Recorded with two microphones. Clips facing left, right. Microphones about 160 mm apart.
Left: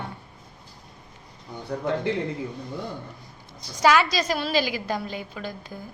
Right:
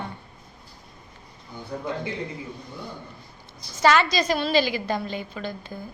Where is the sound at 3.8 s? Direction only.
10° left (ahead or behind).